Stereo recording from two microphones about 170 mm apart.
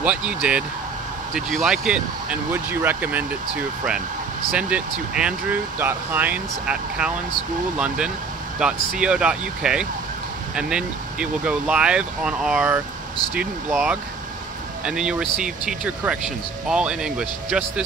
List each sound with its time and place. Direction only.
0.0 s speech: 10° right (ahead or behind)
4.6 s speech: 5° right (ahead or behind)